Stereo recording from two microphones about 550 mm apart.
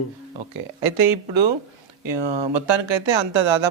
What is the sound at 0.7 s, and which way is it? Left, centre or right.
Speech, right.